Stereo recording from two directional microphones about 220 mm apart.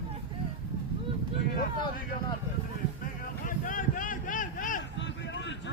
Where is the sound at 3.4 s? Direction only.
40° left (ahead or behind).